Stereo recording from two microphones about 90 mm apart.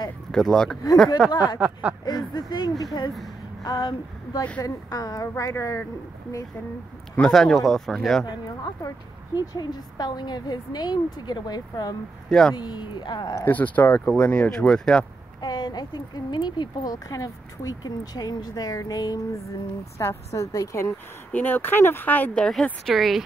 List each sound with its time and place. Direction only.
0.3 s a man's voice: 5° left (ahead or behind)
1.3 s speech: 55° left (ahead or behind)
1.6 s speech: 15° right (ahead or behind)
2.0 s speech: 50° left (ahead or behind)
5.5 s a woman's voice: 30° left (ahead or behind)
7.2 s a man's voice: 5° left (ahead or behind)
8.8 s speech: 45° left (ahead or behind)
12.3 s a man's voice: 5° left (ahead or behind)
12.5 s speech: 55° left (ahead or behind)
13.5 s speech: 20° left (ahead or behind)
15.4 s a woman's voice: 50° left (ahead or behind)
21.3 s speech: 20° left (ahead or behind); by 23.2 s centre (ahead or behind)